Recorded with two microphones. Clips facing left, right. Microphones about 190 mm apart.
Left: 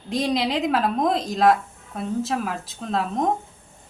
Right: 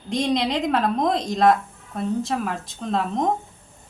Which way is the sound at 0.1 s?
5° left (ahead or behind).